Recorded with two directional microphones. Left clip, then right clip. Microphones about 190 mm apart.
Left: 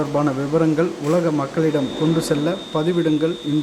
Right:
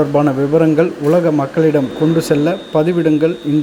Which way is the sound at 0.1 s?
15° right (ahead or behind).